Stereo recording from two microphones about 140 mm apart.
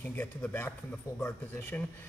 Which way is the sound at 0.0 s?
15° left (ahead or behind).